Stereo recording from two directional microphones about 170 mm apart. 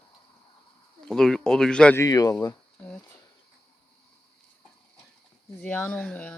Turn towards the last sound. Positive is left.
turn(degrees=5)  # may be behind; listen again after turning